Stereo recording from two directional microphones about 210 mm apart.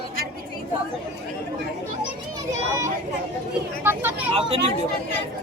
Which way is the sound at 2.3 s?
15° right (ahead or behind).